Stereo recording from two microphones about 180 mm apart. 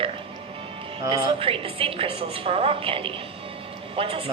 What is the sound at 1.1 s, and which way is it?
A woman's voice, 30° right (ahead or behind).